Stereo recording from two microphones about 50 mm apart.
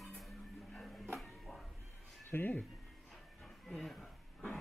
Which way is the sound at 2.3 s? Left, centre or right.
Left.